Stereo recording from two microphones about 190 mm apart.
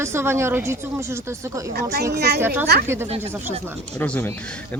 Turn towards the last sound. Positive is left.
turn(degrees=10)  # may be behind; listen again after turning